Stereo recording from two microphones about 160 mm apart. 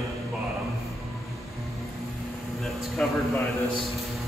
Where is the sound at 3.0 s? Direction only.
5° left (ahead or behind).